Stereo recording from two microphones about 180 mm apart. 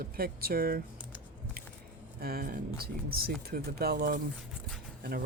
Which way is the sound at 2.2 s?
55° right (ahead or behind).